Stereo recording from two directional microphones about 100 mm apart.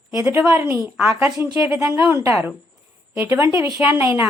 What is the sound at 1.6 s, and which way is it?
Speech, 35° right (ahead or behind).